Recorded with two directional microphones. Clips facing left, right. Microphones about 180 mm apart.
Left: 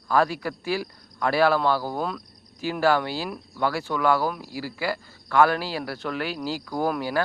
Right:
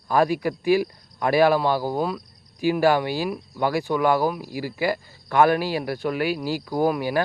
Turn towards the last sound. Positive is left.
turn(degrees=-15)  # may be behind; listen again after turning